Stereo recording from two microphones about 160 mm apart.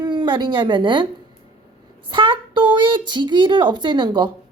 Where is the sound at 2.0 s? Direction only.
30° right (ahead or behind).